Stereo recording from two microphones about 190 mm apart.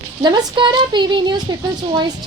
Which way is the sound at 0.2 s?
20° right (ahead or behind).